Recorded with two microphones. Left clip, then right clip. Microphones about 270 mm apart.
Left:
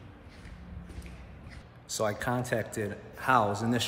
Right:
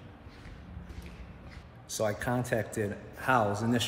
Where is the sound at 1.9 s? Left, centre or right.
Centre.